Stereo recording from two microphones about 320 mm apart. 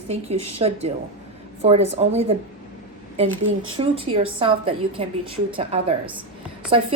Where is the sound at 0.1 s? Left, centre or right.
Centre.